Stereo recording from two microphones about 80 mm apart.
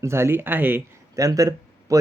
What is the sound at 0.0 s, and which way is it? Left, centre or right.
Speech, right.